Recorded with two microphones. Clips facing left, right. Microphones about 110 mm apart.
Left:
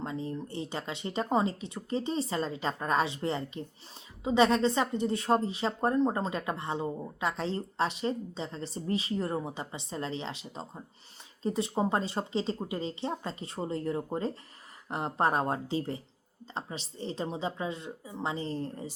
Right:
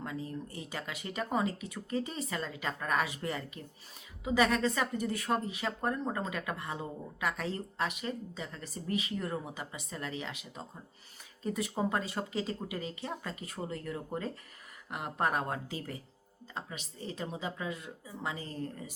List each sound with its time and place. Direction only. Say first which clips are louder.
0.0 s a woman's voice: left 4 dB; 25° left (ahead or behind)